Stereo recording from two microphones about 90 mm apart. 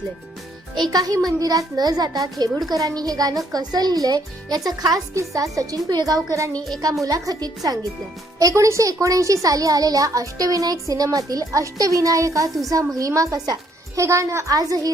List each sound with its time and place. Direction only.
0.9 s a woman's voice: 40° right (ahead or behind)